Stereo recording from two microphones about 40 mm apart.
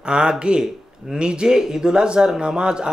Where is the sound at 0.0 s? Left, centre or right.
Right.